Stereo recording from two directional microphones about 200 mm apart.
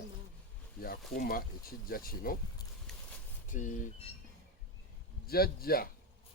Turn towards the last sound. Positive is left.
turn(degrees=50)  # may be behind; listen again after turning